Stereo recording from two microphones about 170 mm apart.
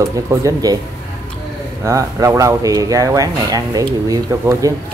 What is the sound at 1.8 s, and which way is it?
Speech, 20° right (ahead or behind).